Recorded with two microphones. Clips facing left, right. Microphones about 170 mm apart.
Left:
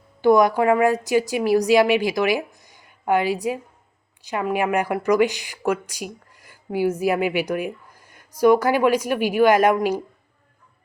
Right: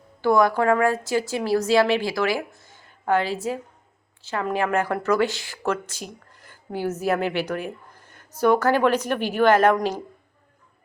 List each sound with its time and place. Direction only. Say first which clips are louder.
0.2 s speech: left 3 dB; 15° left (ahead or behind)